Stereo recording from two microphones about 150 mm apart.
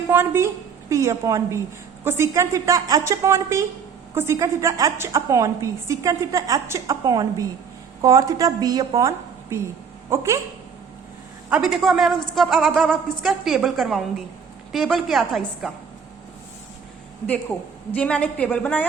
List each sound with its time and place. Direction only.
0.1 s a woman's voice: 15° right (ahead or behind)
11.4 s a man's voice: 5° right (ahead or behind)
17.9 s a woman's voice: 10° left (ahead or behind)